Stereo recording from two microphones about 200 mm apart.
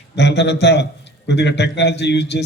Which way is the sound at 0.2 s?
60° left (ahead or behind).